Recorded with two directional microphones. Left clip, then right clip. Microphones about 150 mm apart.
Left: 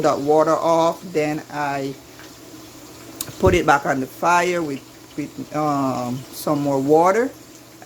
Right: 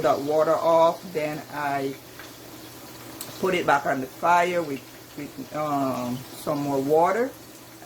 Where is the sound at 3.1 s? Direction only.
80° left.